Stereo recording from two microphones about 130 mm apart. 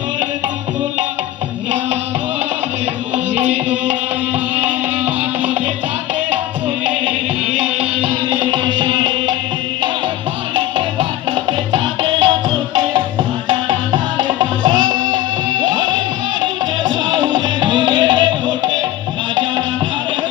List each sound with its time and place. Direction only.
8.0 s music: 40° right (ahead or behind)
10.5 s music: 40° right (ahead or behind)
17.2 s music: 35° right (ahead or behind)